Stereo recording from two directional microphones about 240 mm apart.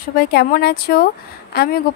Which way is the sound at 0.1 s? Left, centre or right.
Left.